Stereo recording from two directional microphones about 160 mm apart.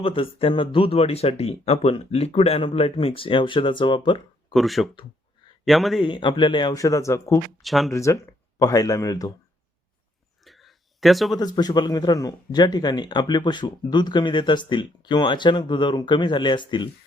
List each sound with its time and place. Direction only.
0.0 s speech: 35° left (ahead or behind)
4.5 s a man's voice: centre (ahead or behind)
6.1 s speech: 30° left (ahead or behind)
7.6 s speech: centre (ahead or behind)
7.9 s speech: 20° left (ahead or behind)
10.4 s a sound: centre (ahead or behind)
11.3 s speech: 25° left (ahead or behind)